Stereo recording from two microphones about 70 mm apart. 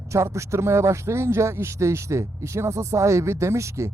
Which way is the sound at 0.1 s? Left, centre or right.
Right.